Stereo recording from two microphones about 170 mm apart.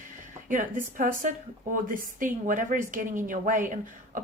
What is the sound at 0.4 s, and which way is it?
Speech, 50° right (ahead or behind).